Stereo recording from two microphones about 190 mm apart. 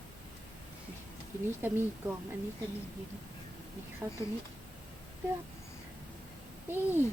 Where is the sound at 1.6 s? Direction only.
10° right (ahead or behind).